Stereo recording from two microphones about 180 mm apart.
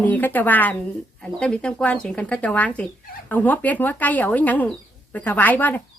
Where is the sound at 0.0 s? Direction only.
10° left (ahead or behind).